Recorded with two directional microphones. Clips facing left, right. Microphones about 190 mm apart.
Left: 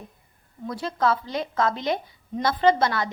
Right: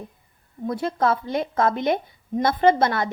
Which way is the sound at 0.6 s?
50° right (ahead or behind).